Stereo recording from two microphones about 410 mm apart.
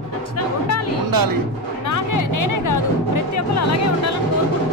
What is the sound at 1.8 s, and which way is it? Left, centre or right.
Music, left.